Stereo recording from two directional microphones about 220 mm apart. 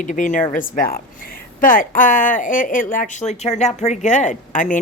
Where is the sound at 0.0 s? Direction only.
35° left (ahead or behind).